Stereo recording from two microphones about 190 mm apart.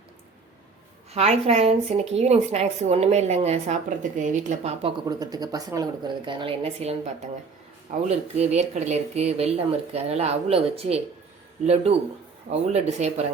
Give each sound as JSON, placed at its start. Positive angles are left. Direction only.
{"t": 1.1, "sound": "a woman's voice", "side_deg": -35}
{"t": 5.0, "sound": "a woman's voice", "side_deg": -20}